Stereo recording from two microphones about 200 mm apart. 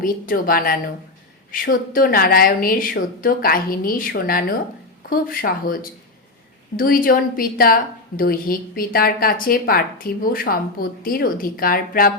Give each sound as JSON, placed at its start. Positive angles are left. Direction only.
{"t": 0.0, "sound": "a woman's voice", "side_deg": 45}
{"t": 6.7, "sound": "a woman's voice", "side_deg": 45}